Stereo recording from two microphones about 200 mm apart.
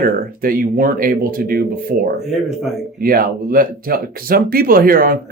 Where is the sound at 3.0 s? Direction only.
45° right (ahead or behind).